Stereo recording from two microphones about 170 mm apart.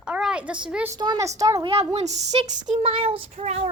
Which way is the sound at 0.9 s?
25° right (ahead or behind).